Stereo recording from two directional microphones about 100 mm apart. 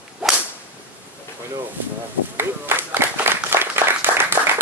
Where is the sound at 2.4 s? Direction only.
25° right (ahead or behind).